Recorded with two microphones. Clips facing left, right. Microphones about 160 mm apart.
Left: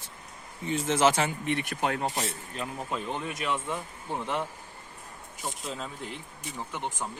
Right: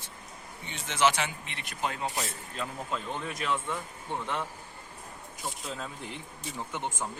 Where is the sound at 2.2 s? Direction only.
25° left (ahead or behind).